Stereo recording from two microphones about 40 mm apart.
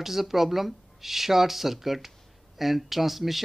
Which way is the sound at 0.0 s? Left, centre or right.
Centre.